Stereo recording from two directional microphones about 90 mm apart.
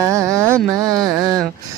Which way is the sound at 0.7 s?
40° right (ahead or behind).